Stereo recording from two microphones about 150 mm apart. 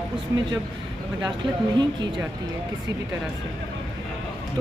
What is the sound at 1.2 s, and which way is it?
Speech, 30° right (ahead or behind).